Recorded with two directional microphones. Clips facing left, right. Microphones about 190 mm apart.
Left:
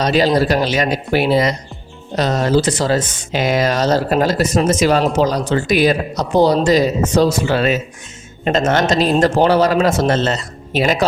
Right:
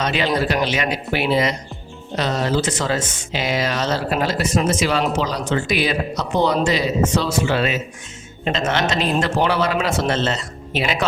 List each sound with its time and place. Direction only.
0.0 s speech: 35° left (ahead or behind)